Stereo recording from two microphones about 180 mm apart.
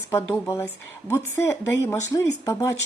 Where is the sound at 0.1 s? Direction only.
15° left (ahead or behind).